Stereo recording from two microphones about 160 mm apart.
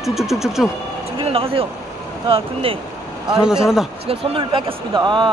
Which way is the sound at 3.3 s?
5° right (ahead or behind).